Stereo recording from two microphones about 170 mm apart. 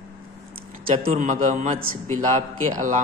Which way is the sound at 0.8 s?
55° right (ahead or behind).